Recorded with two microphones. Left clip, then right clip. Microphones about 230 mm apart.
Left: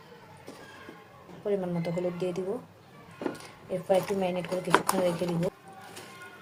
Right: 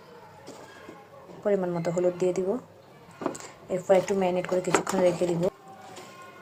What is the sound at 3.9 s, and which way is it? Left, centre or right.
Speech, centre.